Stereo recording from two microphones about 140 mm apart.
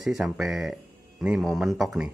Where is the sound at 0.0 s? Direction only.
Centre (ahead or behind).